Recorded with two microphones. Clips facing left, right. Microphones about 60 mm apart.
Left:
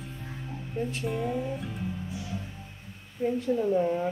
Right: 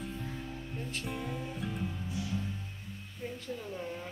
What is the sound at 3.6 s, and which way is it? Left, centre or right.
Speech, left.